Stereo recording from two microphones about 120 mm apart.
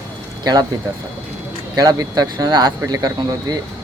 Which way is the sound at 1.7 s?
30° right (ahead or behind).